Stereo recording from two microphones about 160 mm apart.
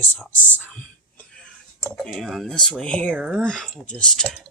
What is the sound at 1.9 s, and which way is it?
Speech, 5° left (ahead or behind).